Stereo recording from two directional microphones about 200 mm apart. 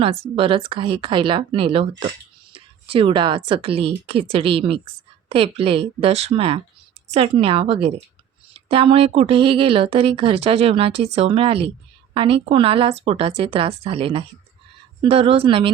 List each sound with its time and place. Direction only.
0.3 s speech: 25° right (ahead or behind)